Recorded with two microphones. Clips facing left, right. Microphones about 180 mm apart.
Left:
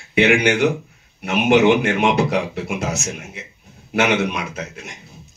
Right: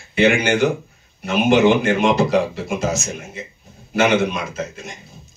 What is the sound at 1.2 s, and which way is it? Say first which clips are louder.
Speech: even; 60° left (ahead or behind).